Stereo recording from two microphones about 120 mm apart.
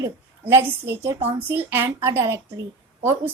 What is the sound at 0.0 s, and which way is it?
A woman's voice, 20° right (ahead or behind).